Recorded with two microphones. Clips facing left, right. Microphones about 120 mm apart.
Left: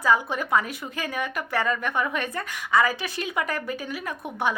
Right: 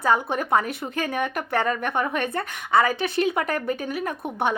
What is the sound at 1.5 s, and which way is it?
A woman's voice, 40° right (ahead or behind).